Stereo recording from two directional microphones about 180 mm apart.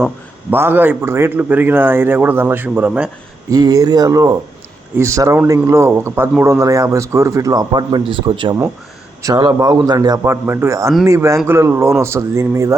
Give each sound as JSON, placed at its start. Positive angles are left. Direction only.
{"t": 0.5, "sound": "a man's voice", "side_deg": -10}
{"t": 3.5, "sound": "a man's voice", "side_deg": -20}
{"t": 10.4, "sound": "a man's voice", "side_deg": -10}